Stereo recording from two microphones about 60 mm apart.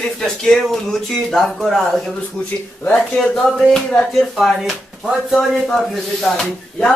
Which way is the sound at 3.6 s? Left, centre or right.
Centre.